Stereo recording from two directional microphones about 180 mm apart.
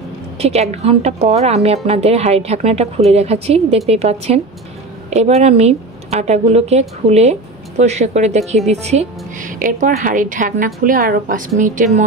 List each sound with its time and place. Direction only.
0.4 s a woman's voice: 35° right (ahead or behind)
9.5 s a woman's voice: 50° right (ahead or behind)